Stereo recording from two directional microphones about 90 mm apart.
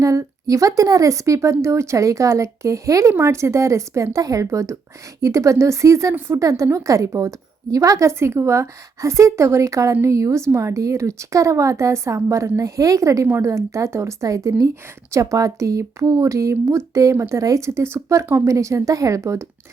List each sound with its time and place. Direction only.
0.0 s a woman's voice: 40° right (ahead or behind)
6.1 s a woman's voice: 25° right (ahead or behind)
6.4 s a woman's voice: 35° right (ahead or behind)